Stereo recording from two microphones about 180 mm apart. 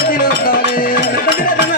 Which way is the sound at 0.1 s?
55° left (ahead or behind).